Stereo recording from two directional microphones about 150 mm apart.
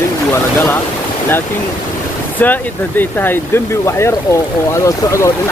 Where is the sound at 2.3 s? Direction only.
10° left (ahead or behind).